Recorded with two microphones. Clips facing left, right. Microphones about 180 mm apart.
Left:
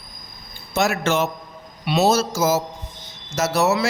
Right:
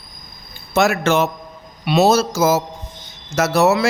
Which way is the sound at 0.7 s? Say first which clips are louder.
Right 4 dB; 60° right (ahead or behind).